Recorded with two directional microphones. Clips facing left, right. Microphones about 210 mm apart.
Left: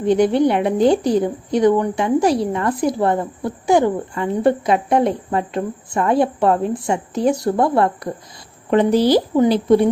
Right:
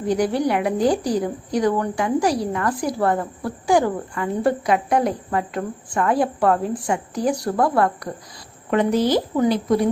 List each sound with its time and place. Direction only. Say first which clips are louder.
0.0 s a woman's voice: left 5 dB; 25° left (ahead or behind)